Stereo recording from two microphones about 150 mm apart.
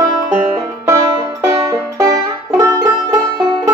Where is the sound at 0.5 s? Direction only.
20° right (ahead or behind).